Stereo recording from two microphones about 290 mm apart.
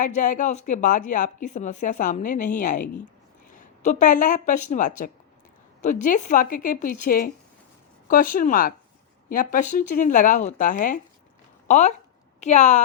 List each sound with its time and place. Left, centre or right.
0.2 s a woman's voice: left